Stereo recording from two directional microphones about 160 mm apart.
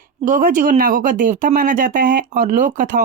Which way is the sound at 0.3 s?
55° right (ahead or behind).